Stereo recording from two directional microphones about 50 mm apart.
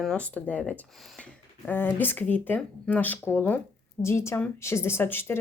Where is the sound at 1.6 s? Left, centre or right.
Left.